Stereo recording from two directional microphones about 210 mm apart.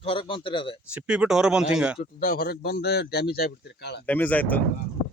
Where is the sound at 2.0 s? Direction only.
45° left (ahead or behind).